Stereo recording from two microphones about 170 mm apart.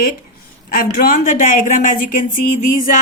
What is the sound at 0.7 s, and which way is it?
A woman's voice, 55° left (ahead or behind).